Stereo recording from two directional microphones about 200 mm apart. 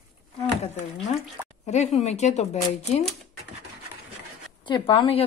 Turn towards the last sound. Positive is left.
turn(degrees=25)  # may be behind; listen again after turning